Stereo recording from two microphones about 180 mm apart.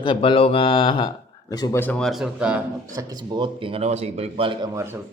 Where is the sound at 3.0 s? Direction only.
20° right (ahead or behind).